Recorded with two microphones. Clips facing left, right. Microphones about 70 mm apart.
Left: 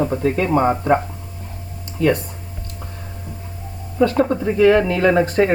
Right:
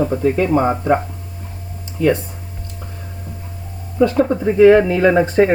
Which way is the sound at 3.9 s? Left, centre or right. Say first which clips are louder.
Right 2 dB; centre.